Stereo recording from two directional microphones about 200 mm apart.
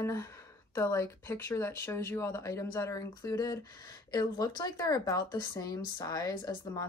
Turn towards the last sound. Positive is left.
turn(degrees=20)  # may be behind; listen again after turning